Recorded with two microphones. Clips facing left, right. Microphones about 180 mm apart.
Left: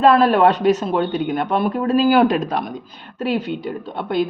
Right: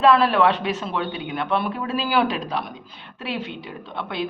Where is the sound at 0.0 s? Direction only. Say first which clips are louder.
Left 4 dB; 45° left (ahead or behind).